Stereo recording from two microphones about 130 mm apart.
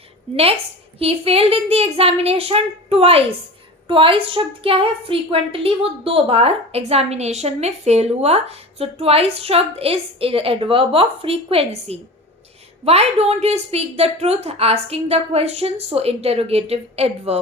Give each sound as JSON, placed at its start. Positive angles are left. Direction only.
{"t": 0.3, "sound": "a woman's voice", "side_deg": -45}